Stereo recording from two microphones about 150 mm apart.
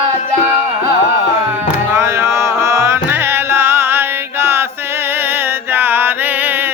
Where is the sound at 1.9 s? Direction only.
15° right (ahead or behind).